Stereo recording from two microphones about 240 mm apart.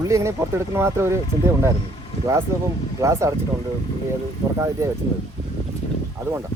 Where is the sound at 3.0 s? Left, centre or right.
Centre.